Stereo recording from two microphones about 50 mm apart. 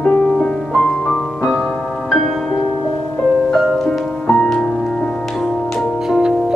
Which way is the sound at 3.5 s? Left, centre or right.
Centre.